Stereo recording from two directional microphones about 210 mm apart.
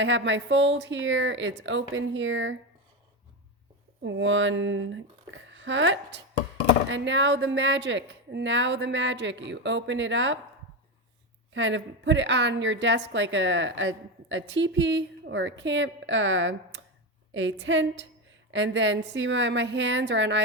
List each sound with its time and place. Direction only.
0.0 s a woman's voice: 60° right (ahead or behind)
4.0 s a woman's voice: 60° right (ahead or behind)
11.5 s a woman's voice: 60° right (ahead or behind)